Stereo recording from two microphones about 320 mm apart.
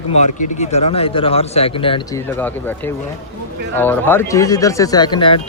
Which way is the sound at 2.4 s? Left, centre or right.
Centre.